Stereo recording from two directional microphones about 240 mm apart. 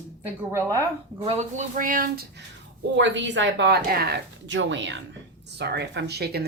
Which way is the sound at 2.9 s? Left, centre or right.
Right.